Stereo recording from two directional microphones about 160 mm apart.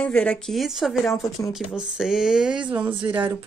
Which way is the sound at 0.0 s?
5° left (ahead or behind).